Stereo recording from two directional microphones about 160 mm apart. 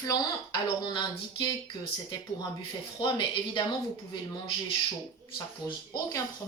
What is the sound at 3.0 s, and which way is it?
Speech, 30° left (ahead or behind).